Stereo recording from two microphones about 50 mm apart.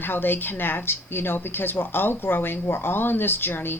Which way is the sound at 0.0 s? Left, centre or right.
Left.